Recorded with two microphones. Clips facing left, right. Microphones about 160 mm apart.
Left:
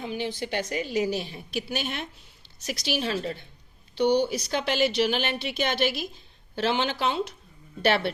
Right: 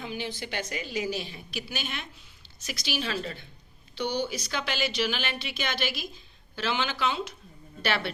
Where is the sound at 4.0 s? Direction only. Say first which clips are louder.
Left 8 dB; 60° left (ahead or behind).